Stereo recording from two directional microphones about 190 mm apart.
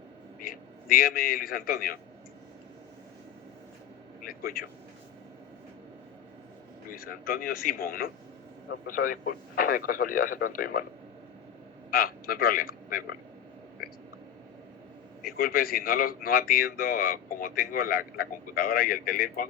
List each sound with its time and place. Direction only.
0.3 s a man's voice: 50° left (ahead or behind)
4.2 s speech: 50° left (ahead or behind)
6.9 s speech: 50° left (ahead or behind)
11.9 s a man's voice: 50° left (ahead or behind)
15.4 s speech: 50° left (ahead or behind)